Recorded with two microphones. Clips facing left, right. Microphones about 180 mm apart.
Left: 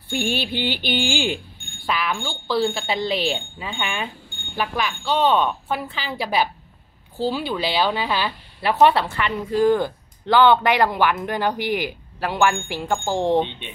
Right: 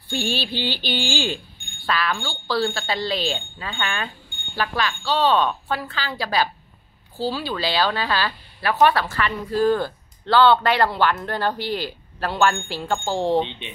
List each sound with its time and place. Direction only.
0.1 s a woman's voice: 20° left (ahead or behind)